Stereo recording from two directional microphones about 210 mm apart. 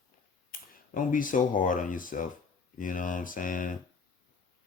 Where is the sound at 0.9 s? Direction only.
40° left (ahead or behind).